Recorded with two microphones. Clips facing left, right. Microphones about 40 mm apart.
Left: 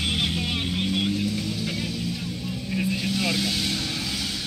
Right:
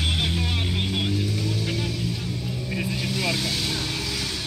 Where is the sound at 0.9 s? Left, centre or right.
Centre.